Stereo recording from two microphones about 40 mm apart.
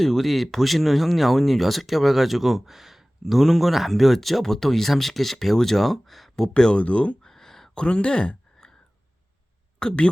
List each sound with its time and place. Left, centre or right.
0.0 s speech: centre
6.7 s speech: left
7.2 s a sound: centre
7.8 s speech: left
9.7 s speech: left